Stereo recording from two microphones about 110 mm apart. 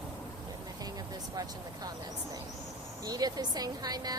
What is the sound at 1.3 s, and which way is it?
Speech, 35° right (ahead or behind).